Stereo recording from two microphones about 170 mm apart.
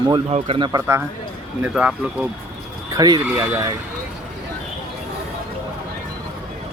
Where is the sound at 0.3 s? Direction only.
35° right (ahead or behind).